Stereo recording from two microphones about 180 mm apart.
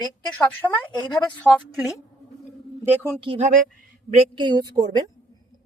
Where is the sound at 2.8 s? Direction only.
10° right (ahead or behind).